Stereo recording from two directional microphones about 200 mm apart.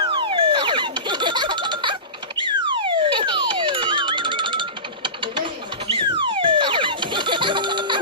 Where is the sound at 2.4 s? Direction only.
25° right (ahead or behind).